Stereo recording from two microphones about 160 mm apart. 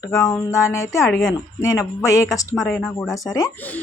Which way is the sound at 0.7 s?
15° left (ahead or behind).